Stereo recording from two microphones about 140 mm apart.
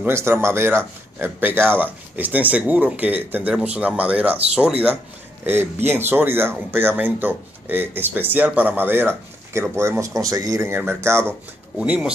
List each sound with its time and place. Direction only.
0.0 s speech: 15° right (ahead or behind)
5.4 s speech: 15° right (ahead or behind)
11.8 s speech: 5° right (ahead or behind)